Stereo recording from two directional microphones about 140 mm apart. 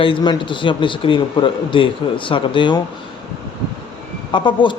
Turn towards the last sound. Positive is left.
turn(degrees=35)  # may be behind; listen again after turning